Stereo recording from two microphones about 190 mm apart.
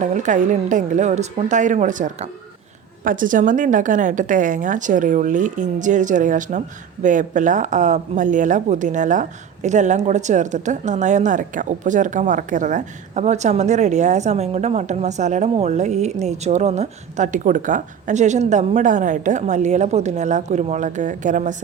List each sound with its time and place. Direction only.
0.0 s a woman's voice: 40° right (ahead or behind)